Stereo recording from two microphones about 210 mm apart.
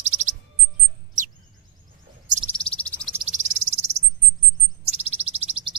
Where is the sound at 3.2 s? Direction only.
35° right (ahead or behind).